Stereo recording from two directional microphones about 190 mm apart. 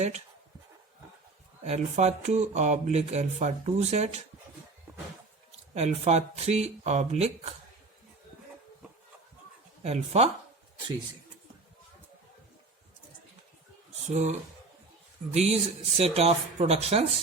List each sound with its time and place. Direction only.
1.6 s speech: 35° right (ahead or behind)
5.5 s speech: 35° right (ahead or behind)
9.8 s speech: 35° right (ahead or behind)
14.1 s speech: 35° right (ahead or behind)